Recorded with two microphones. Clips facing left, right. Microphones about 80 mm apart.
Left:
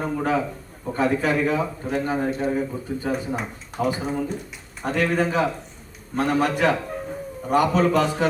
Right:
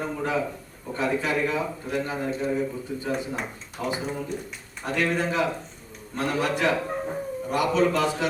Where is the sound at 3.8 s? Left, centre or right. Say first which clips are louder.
Left 5 dB; left.